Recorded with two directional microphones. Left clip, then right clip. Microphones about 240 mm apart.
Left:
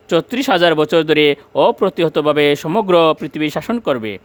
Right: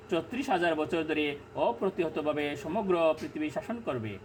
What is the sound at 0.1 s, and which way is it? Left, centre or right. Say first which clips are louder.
Speech: left 15 dB; left.